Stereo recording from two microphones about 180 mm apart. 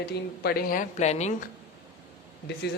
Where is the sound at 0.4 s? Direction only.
50° left (ahead or behind).